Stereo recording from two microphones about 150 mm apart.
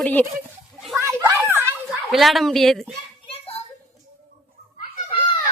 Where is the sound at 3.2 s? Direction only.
40° left (ahead or behind).